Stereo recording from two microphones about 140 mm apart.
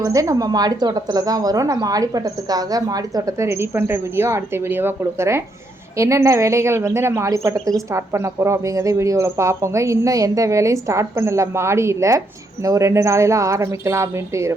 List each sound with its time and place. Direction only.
0.0 s a woman's voice: 25° right (ahead or behind)